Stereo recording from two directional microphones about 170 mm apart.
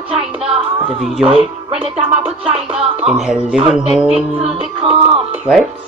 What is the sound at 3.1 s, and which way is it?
Speech, 5° right (ahead or behind).